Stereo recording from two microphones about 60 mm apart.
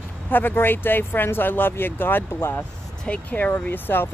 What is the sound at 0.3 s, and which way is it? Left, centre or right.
Speech, left.